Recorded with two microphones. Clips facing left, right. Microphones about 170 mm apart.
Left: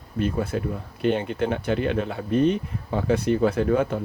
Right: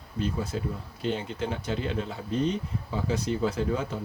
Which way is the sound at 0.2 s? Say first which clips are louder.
Left 5 dB; 60° left (ahead or behind).